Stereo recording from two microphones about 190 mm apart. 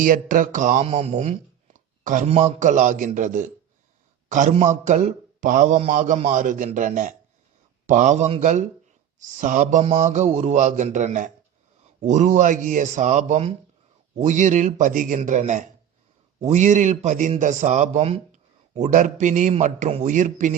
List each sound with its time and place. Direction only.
0.0 s a man's voice: 45° right (ahead or behind)